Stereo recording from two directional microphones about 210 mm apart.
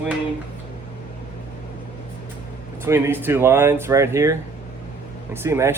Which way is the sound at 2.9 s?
10° right (ahead or behind).